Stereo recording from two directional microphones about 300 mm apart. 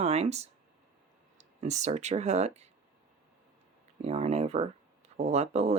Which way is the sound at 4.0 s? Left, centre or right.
Right.